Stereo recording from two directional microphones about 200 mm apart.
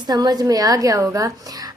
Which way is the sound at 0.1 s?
20° right (ahead or behind).